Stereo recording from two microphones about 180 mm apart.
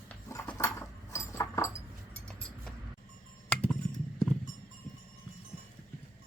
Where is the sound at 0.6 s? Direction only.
15° left (ahead or behind).